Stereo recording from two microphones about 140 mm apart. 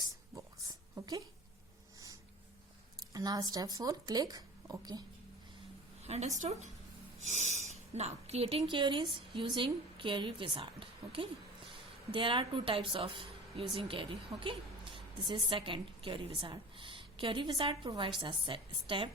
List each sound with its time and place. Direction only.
0.0 s a sound: 25° right (ahead or behind)
3.1 s speech: 30° right (ahead or behind)
6.0 s a woman's voice: 50° right (ahead or behind)